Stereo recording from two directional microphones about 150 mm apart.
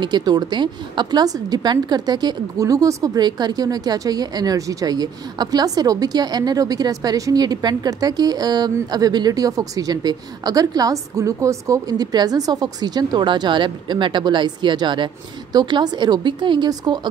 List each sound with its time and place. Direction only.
0.0 s a woman's voice: 30° right (ahead or behind)